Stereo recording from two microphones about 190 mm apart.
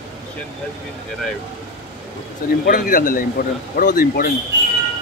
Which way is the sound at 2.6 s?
45° left (ahead or behind).